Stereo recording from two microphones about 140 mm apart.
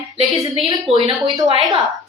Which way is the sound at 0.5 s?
35° right (ahead or behind).